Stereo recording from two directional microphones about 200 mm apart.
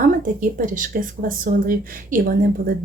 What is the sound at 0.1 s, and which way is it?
A woman's voice, 40° right (ahead or behind).